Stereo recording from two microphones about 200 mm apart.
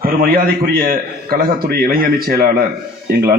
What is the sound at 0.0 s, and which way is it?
A man's voice, 45° right (ahead or behind).